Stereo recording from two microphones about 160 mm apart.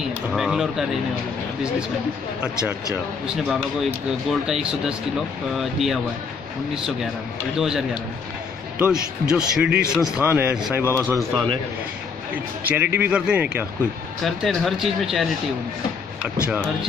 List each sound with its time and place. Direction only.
0.3 s speech: centre (ahead or behind)
2.4 s speech: 5° right (ahead or behind)
7.5 s speech: 5° right (ahead or behind)
12.6 s speech: 10° right (ahead or behind)
16.3 s speech: 10° right (ahead or behind)